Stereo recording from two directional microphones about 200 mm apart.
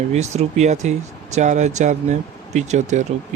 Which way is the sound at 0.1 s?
35° right (ahead or behind).